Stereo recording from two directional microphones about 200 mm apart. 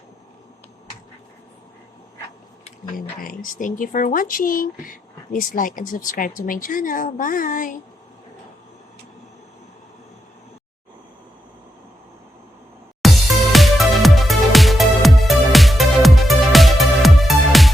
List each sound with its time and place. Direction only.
2.9 s speech: 45° left (ahead or behind)
13.0 s music: centre (ahead or behind)